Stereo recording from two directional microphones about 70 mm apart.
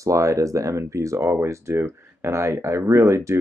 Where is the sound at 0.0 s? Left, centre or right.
Right.